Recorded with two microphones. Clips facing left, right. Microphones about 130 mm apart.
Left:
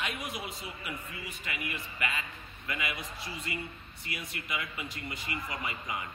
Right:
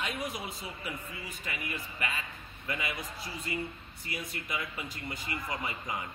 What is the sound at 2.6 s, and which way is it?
A man's voice, 35° right (ahead or behind).